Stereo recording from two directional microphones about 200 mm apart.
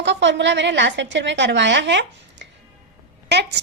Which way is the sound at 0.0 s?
60° right (ahead or behind).